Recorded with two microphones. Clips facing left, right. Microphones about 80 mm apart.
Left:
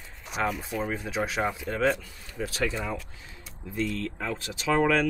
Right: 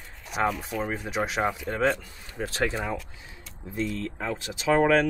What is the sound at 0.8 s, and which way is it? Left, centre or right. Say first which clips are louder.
Speech: right 1 dB; centre.